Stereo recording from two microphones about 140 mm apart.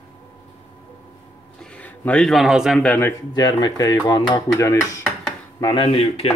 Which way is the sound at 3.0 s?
25° left (ahead or behind).